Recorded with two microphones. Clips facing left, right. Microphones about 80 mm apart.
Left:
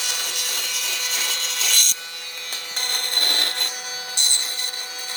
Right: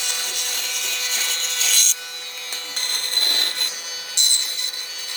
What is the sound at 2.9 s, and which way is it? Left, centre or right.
Music, left.